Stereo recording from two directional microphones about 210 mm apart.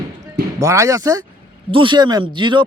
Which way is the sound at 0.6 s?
15° right (ahead or behind).